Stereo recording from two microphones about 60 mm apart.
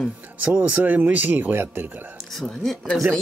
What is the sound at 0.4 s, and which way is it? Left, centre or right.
Speech, centre.